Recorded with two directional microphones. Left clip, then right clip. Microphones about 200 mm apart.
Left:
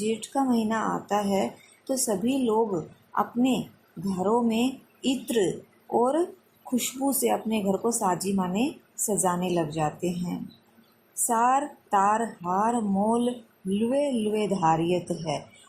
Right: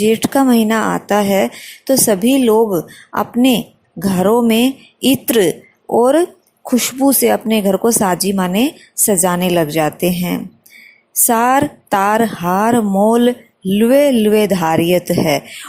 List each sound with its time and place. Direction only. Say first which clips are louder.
0.0 s speech: right 14 dB; 40° right (ahead or behind)
11.3 s speech: right 10 dB; 40° right (ahead or behind)